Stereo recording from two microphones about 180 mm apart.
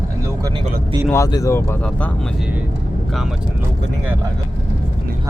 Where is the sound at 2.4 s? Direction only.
10° right (ahead or behind).